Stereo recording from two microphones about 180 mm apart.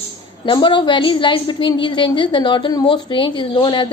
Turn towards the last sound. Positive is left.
turn(degrees=25)  # may be behind; listen again after turning